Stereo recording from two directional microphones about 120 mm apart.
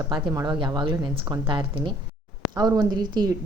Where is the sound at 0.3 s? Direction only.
35° right (ahead or behind).